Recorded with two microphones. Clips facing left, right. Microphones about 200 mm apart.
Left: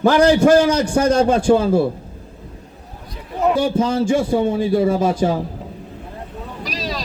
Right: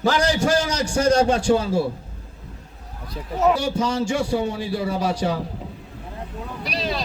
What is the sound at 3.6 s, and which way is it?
A man's voice, 55° left (ahead or behind).